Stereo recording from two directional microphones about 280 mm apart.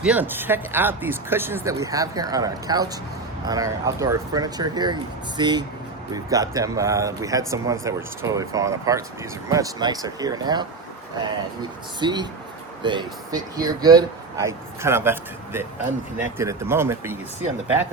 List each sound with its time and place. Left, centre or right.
0.0 s speech: centre
11.9 s speech: centre